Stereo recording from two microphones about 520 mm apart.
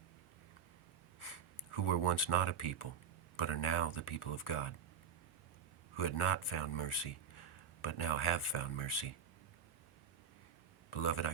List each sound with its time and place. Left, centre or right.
1.2 s speech: left
6.0 s speech: left
10.9 s speech: left